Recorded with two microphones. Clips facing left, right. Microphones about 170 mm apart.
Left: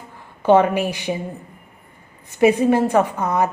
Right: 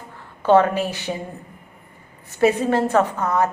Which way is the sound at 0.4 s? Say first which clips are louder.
Left 1 dB; 15° left (ahead or behind).